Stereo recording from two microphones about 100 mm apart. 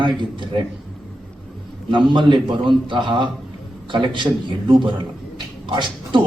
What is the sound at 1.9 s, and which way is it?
Speech, 55° right (ahead or behind).